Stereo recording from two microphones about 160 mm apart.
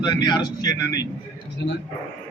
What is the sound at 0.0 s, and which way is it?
Speech, 25° left (ahead or behind).